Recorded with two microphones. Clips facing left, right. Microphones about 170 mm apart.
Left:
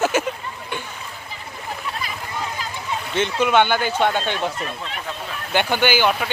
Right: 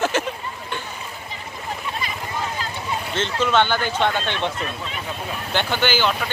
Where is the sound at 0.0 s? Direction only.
10° left (ahead or behind).